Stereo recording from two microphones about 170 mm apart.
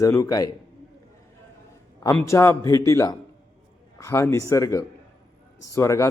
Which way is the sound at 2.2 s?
15° left (ahead or behind).